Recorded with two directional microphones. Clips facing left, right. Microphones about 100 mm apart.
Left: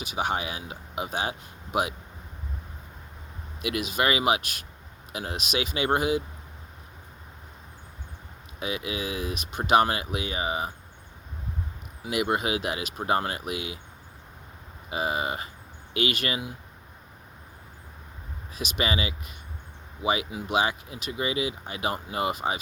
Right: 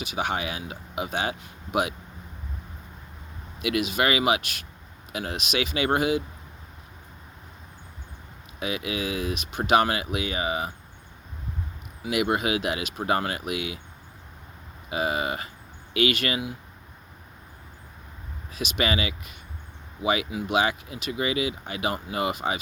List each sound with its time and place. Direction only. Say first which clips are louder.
0.0 s speech: even; 40° left (ahead or behind)
3.6 s speech: right 2 dB; 40° left (ahead or behind)
8.5 s speech: right 2 dB; 35° left (ahead or behind)
12.0 s speech: right 2 dB; 40° left (ahead or behind)
14.8 s speech: right 2 dB; 35° left (ahead or behind)
18.6 s speech: right 2 dB; 35° left (ahead or behind)